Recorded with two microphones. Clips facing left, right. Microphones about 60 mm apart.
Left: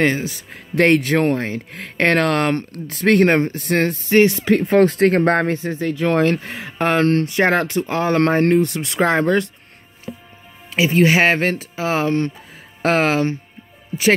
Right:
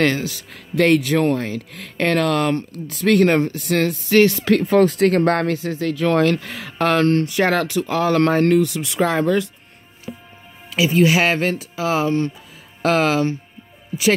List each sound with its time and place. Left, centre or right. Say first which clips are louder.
0.0 s speech: even; left
4.2 s speech: even; left
8.6 s speech: left 2 dB; left
10.7 s speech: left 1 dB; left